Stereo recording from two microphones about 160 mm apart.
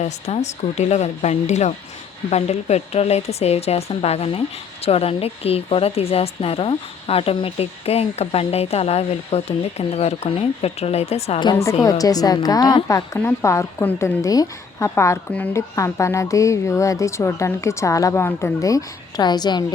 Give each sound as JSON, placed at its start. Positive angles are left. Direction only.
{"t": 0.0, "sound": "a woman's voice", "side_deg": 45}
{"t": 11.8, "sound": "a woman's voice", "side_deg": 20}